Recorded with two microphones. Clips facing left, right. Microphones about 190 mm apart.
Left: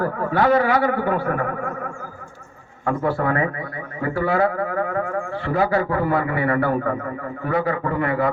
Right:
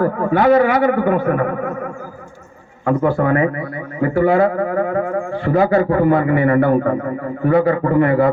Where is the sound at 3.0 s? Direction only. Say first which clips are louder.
Right 5 dB; 25° right (ahead or behind).